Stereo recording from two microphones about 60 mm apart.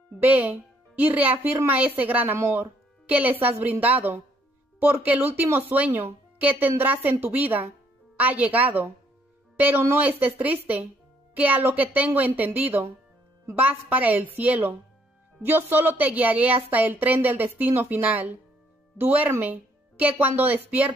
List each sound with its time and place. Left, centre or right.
0.2 s a woman's voice: right
2.3 s a woman's voice: right
3.1 s a woman's voice: right
4.7 s a woman's voice: right